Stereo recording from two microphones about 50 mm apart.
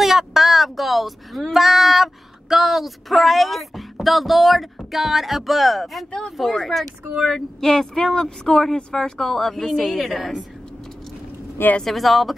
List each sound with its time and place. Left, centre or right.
0.0 s speech: centre
11.8 s speech: centre